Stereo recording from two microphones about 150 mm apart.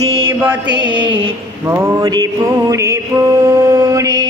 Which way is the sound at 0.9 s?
35° right (ahead or behind).